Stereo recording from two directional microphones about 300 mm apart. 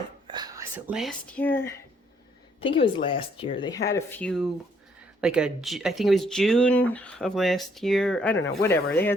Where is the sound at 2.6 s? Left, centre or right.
Centre.